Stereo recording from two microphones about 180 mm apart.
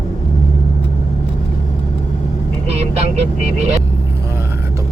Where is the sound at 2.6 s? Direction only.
35° right (ahead or behind).